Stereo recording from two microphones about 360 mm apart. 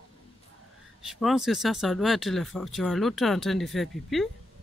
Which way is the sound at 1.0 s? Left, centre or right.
Centre.